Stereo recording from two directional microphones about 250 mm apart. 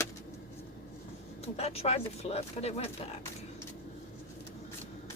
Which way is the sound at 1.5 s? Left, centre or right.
Left.